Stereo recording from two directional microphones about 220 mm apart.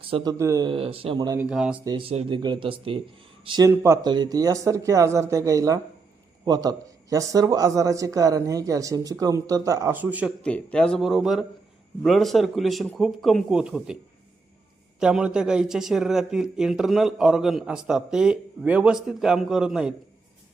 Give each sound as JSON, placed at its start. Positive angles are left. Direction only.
{"t": 0.0, "sound": "speech", "side_deg": -25}
{"t": 1.5, "sound": "speech", "side_deg": -5}
{"t": 1.8, "sound": "a man's voice", "side_deg": -20}
{"t": 10.4, "sound": "speech", "side_deg": 5}